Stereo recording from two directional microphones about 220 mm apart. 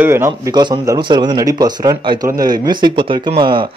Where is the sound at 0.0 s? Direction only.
10° right (ahead or behind).